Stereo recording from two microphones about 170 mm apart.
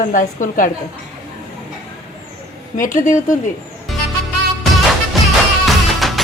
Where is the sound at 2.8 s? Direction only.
50° left (ahead or behind).